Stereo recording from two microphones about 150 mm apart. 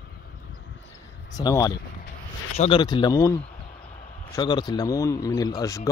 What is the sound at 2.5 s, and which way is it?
Speech, 45° left (ahead or behind).